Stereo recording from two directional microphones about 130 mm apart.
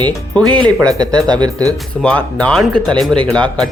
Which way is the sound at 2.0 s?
10° left (ahead or behind).